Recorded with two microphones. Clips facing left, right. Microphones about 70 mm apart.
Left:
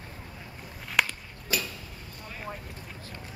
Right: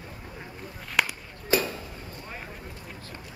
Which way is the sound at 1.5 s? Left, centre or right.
Right.